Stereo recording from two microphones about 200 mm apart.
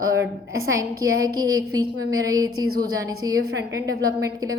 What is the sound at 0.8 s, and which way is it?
A woman's voice, 20° right (ahead or behind).